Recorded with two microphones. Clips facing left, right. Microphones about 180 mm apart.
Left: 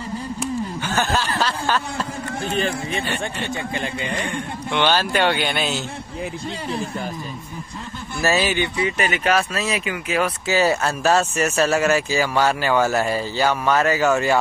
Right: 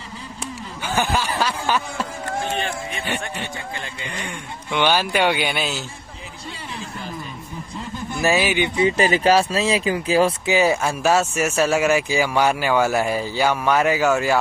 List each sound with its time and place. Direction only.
0.8 s speech: 10° right (ahead or behind)
4.7 s speech: 10° right (ahead or behind)
8.2 s speech: 15° right (ahead or behind)
8.7 s speech: 30° right (ahead or behind)
10.4 s speech: 15° right (ahead or behind)